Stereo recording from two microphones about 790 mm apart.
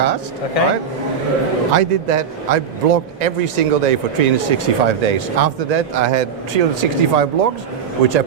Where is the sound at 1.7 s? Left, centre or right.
Right.